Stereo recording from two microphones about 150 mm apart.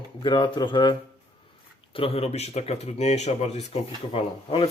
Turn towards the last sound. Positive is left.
turn(degrees=40)  # may be behind; listen again after turning